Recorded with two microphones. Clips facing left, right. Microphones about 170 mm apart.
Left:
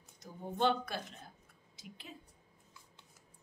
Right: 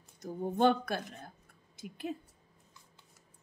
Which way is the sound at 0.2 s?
50° right (ahead or behind).